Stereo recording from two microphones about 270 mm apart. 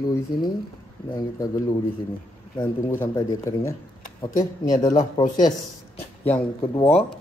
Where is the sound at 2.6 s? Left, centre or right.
Centre.